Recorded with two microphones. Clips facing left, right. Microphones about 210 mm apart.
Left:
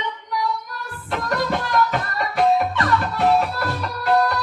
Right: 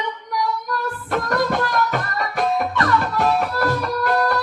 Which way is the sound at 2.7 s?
45° right (ahead or behind).